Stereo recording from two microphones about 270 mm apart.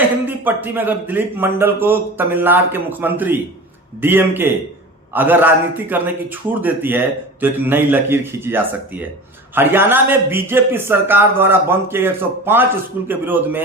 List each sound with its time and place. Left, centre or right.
0.3 s speech: centre